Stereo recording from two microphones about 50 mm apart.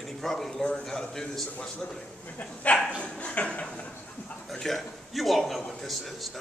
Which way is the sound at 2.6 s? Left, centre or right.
Left.